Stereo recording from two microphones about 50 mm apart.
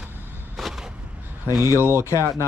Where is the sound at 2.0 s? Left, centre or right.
Left.